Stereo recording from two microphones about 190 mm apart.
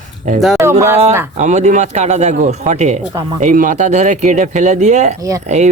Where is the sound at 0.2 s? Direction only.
40° right (ahead or behind).